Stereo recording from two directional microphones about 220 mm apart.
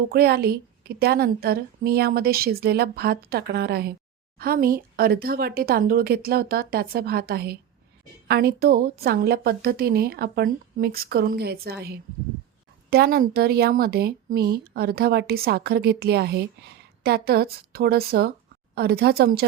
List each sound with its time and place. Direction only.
0.1 s speech: 45° right (ahead or behind)